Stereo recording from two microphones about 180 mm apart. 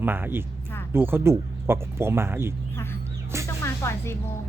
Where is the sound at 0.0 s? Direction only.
10° right (ahead or behind).